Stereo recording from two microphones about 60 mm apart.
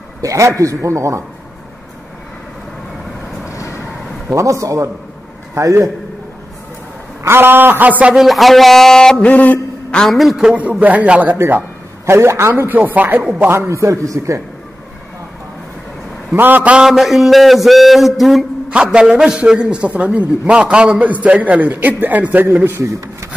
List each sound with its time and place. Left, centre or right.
0.2 s a man's voice: right
4.3 s a man's voice: right
7.2 s a man's voice: right
8.1 s a man's voice: centre
9.2 s a sound: left
10.5 s a man's voice: right
11.3 s a man's voice: right
12.7 s a man's voice: right
13.4 s a man's voice: right
13.7 s a man's voice: right
16.3 s a man's voice: right
16.7 s a man's voice: centre
18.7 s a man's voice: centre; by 22.8 s right
22.8 s speech: right